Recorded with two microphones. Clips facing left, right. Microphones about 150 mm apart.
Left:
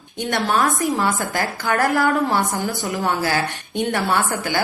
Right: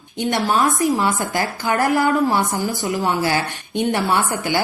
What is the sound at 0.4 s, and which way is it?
A woman's voice, 20° right (ahead or behind).